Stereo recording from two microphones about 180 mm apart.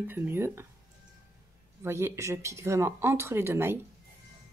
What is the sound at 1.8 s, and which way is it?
Speech, 15° right (ahead or behind).